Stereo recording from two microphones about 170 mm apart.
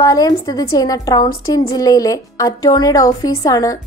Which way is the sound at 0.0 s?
20° left (ahead or behind).